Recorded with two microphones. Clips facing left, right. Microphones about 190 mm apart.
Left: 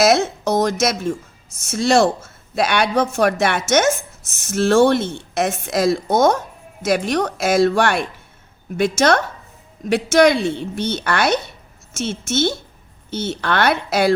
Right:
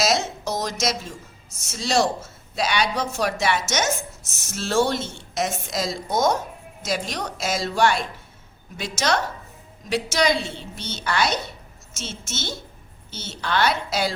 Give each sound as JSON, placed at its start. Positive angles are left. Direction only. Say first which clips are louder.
{"t": 0.0, "sound": "speech", "louder": "left 7 dB", "side_deg": 55}